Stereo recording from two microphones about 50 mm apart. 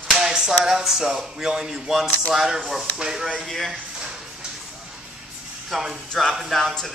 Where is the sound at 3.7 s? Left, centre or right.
Centre.